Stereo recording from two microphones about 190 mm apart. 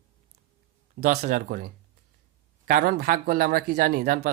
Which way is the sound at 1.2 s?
55° right (ahead or behind).